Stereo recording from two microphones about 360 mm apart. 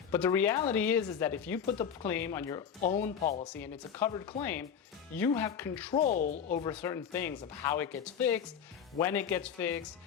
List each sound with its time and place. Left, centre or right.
0.1 s speech: centre
6.0 s speech: left; by 9.8 s centre